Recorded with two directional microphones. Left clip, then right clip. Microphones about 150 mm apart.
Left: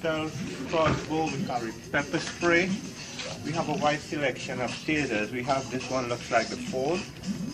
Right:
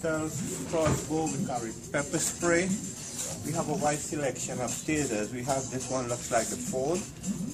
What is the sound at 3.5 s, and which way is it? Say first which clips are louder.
Speech: left 3 dB; 20° right (ahead or behind).